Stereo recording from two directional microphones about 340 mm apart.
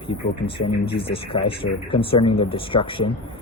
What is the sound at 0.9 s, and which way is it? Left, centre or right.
Speech, centre.